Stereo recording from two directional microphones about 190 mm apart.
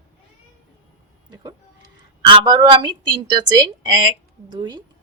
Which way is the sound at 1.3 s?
20° right (ahead or behind).